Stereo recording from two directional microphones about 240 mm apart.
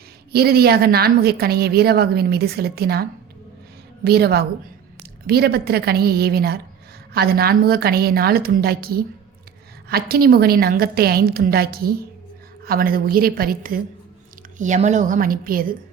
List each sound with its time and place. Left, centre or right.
0.3 s a woman's voice: right